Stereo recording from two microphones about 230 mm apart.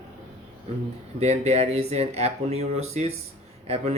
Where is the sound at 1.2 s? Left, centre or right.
Right.